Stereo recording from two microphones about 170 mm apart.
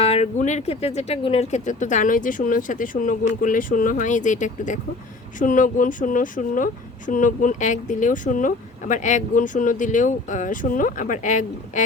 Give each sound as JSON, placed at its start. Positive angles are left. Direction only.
{"t": 0.0, "sound": "speech", "side_deg": 40}